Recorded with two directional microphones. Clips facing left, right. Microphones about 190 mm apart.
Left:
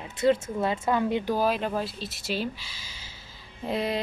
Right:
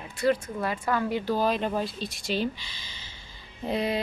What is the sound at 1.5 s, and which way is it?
Speech, centre (ahead or behind).